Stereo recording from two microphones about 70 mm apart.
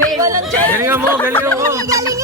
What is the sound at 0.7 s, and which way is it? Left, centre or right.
Speech, right.